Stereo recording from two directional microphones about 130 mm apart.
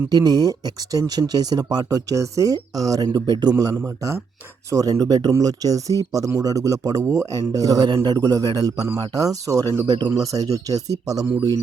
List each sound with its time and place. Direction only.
0.1 s speech: 30° right (ahead or behind)
3.8 s speech: 20° right (ahead or behind)